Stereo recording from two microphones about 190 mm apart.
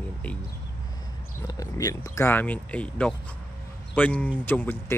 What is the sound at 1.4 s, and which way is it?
Speech, 20° left (ahead or behind).